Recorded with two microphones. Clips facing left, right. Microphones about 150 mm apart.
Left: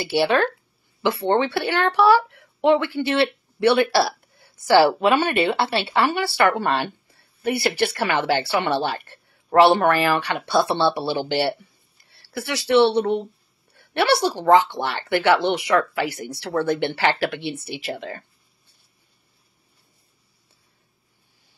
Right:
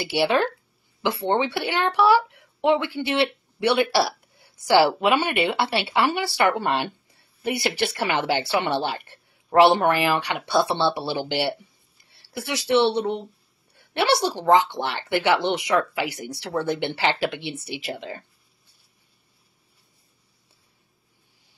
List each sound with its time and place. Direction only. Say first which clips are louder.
0.0 s a woman's voice: left 2 dB; 15° right (ahead or behind)